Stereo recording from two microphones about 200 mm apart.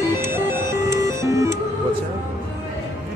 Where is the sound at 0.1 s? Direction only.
10° right (ahead or behind).